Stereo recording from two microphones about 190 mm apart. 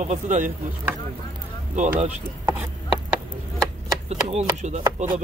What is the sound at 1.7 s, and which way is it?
Speech, 40° right (ahead or behind).